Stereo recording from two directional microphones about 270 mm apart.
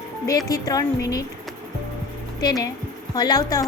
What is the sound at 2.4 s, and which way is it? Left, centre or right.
A woman's voice, centre.